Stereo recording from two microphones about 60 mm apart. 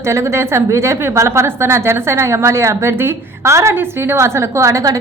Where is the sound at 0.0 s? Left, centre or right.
Right.